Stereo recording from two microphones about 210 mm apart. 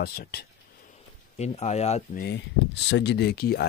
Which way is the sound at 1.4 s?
30° left (ahead or behind).